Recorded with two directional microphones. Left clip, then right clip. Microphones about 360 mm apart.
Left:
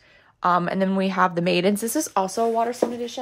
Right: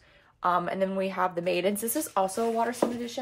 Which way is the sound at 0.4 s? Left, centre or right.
Left.